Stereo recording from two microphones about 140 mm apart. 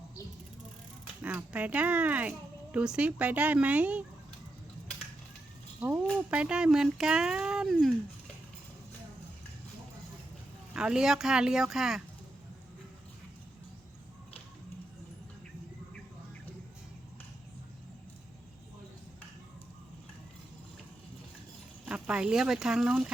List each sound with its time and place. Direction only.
1.2 s speech: 10° right (ahead or behind)
5.8 s speech: 10° right (ahead or behind)
10.8 s speech: 5° right (ahead or behind)
21.8 s speech: 5° right (ahead or behind)